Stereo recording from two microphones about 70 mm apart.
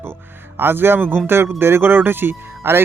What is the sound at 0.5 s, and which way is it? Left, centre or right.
Speech, right.